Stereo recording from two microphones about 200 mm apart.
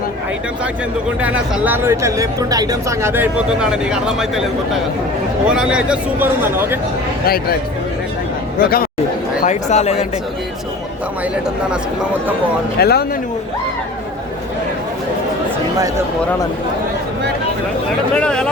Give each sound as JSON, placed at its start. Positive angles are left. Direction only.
{"t": 1.2, "sound": "speech", "side_deg": -10}
{"t": 7.3, "sound": "a man's voice", "side_deg": 50}
{"t": 8.6, "sound": "a man's voice", "side_deg": 45}
{"t": 9.4, "sound": "speech", "side_deg": 35}
{"t": 12.8, "sound": "a man's voice", "side_deg": 50}
{"t": 18.1, "sound": "speech", "side_deg": 5}